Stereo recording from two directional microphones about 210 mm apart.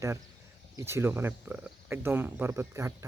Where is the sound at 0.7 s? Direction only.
10° right (ahead or behind).